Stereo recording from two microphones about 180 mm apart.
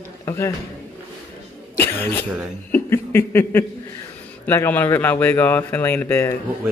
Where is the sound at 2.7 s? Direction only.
15° left (ahead or behind).